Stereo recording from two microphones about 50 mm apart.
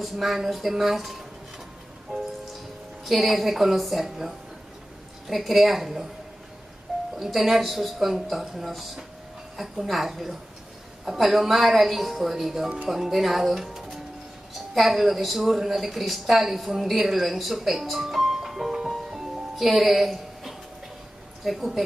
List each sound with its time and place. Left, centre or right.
0.0 s a woman's voice: centre
2.1 s rain on surface: right
3.1 s a woman's voice: centre
5.3 s a woman's voice: centre
7.2 s a woman's voice: centre